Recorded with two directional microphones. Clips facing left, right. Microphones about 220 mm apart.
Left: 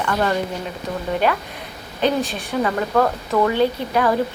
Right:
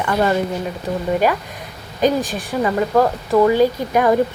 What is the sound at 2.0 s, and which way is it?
Speech, 10° right (ahead or behind).